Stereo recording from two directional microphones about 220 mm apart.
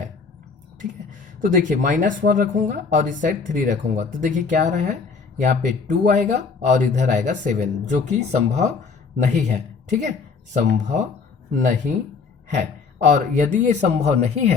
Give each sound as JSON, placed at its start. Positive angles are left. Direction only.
{"t": 1.4, "sound": "speech", "side_deg": -35}
{"t": 13.1, "sound": "speech", "side_deg": -35}